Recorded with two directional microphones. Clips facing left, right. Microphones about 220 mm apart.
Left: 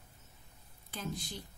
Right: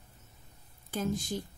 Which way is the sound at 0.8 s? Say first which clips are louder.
Right 9 dB; 45° right (ahead or behind).